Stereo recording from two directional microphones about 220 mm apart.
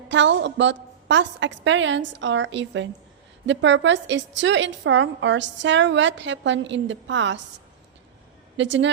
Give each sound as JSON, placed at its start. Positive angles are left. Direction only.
{"t": 0.1, "sound": "a woman's voice", "side_deg": -55}
{"t": 8.5, "sound": "a woman's voice", "side_deg": -55}